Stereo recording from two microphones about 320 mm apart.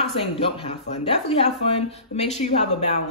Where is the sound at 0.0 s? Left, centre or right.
Centre.